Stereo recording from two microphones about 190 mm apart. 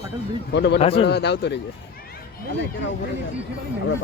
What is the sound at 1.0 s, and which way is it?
Speech, 60° left (ahead or behind).